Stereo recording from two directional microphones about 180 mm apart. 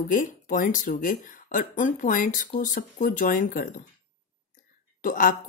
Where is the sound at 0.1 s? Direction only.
45° left (ahead or behind).